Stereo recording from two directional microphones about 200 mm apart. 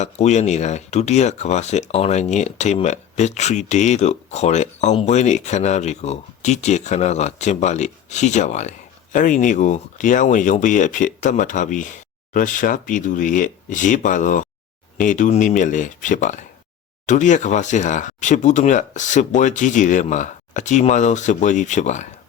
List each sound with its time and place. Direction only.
0.0 s speech: 35° left (ahead or behind)